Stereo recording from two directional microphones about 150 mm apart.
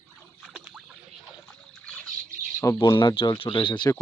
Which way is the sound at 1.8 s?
5° left (ahead or behind).